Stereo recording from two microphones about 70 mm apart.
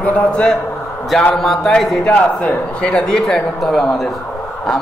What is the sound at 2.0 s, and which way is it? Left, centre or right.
Speech, left.